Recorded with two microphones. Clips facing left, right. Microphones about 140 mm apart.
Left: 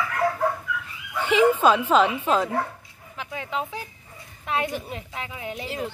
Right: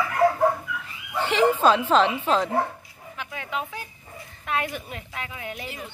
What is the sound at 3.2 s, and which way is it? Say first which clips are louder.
A woman's voice: left 2 dB; 30° left (ahead or behind).